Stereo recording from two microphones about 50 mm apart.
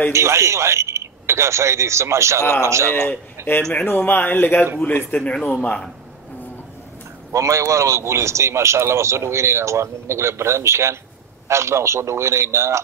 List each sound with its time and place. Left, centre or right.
0.1 s a man's voice: right
3.8 s speech: left
5.2 s speech: left
7.3 s a man's voice: right